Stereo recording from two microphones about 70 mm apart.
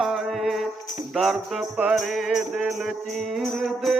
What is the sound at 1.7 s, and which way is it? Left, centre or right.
Music, centre.